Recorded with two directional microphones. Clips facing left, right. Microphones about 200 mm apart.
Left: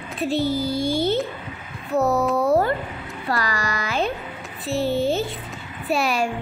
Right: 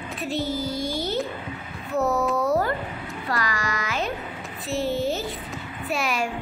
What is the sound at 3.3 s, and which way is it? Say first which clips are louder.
Music: left 3 dB; 35° left (ahead or behind).